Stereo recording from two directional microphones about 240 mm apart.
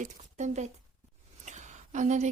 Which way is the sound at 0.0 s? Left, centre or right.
Right.